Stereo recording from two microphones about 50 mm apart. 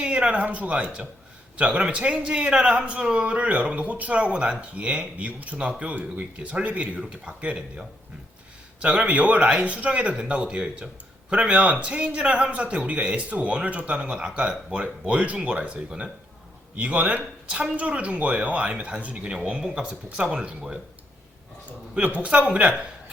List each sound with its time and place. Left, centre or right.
0.0 s speech: right
21.7 s speech: right